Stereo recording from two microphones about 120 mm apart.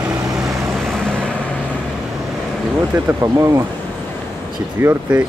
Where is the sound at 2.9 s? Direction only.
25° right (ahead or behind).